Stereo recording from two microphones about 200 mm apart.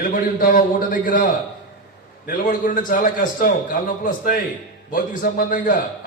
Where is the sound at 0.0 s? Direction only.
45° left (ahead or behind).